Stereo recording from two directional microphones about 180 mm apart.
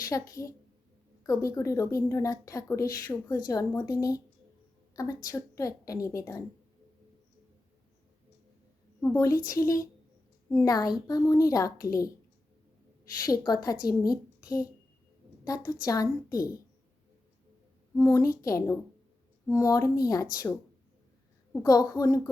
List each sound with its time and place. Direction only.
0.1 s a woman's voice: 15° left (ahead or behind)
9.0 s a woman's voice: 15° left (ahead or behind)
13.1 s a child's voice: 20° left (ahead or behind)
17.9 s a woman's voice: 15° left (ahead or behind)
21.5 s speech: 20° left (ahead or behind)